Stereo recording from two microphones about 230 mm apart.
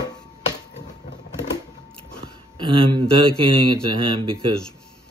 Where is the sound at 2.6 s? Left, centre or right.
Right.